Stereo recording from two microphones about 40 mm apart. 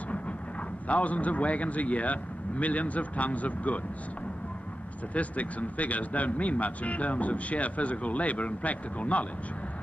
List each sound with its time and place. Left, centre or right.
0.8 s speech: left
5.1 s speech: left